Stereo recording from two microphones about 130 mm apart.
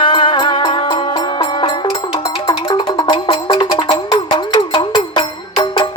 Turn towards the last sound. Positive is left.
turn(degrees=40)  # may be behind; listen again after turning